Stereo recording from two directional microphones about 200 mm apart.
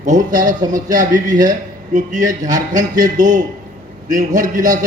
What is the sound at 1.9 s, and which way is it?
A man's voice, 40° right (ahead or behind).